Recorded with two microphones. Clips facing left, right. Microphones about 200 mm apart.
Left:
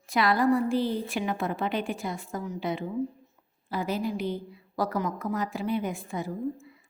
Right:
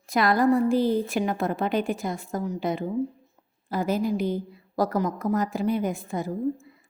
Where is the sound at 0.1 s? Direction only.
45° right (ahead or behind).